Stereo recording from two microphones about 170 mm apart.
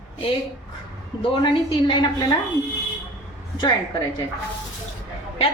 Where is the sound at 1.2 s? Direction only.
30° left (ahead or behind).